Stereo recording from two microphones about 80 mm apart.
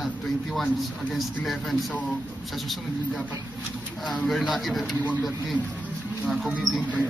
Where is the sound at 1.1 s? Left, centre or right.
Centre.